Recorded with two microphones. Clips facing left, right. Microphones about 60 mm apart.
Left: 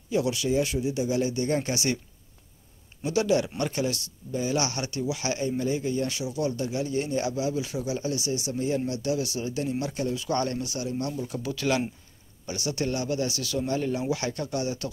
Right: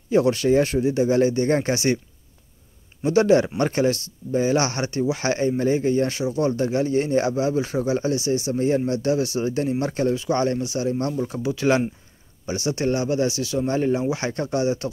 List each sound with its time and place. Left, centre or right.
0.1 s speech: right
3.0 s speech: right
10.2 s speech: right
10.9 s speech: right